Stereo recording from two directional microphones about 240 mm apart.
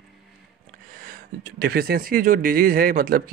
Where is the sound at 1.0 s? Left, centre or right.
Right.